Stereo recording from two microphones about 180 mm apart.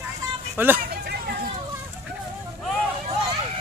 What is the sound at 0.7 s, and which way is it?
Hubbub, 55° right (ahead or behind).